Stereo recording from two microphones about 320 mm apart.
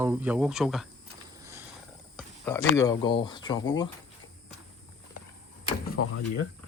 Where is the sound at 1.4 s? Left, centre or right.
Centre.